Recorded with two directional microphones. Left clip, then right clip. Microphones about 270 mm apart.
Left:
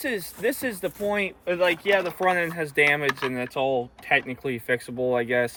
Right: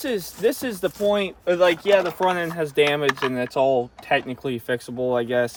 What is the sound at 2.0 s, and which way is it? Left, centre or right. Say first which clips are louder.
Speech: right 3 dB; right.